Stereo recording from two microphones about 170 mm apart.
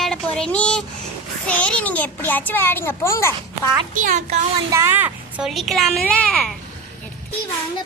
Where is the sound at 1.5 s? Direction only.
5° left (ahead or behind).